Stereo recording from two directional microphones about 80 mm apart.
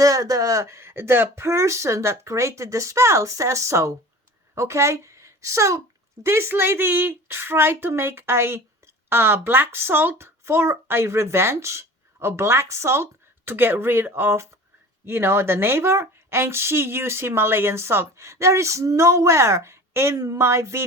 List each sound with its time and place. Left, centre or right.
0.0 s a child's voice: right
20.1 s a child's voice: right